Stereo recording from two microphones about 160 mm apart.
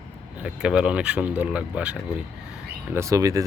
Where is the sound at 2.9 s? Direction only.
20° right (ahead or behind).